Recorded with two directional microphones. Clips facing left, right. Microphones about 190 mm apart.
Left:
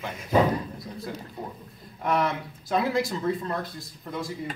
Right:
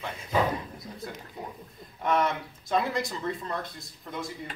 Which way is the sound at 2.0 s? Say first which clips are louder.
Left 1 dB; centre (ahead or behind).